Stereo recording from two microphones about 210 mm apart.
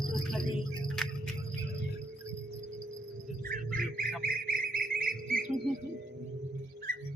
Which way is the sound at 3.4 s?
40° right (ahead or behind).